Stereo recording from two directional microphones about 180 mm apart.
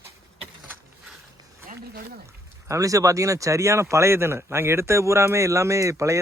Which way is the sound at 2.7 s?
20° right (ahead or behind).